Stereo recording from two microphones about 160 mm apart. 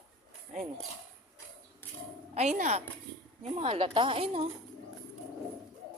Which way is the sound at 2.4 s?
50° right (ahead or behind).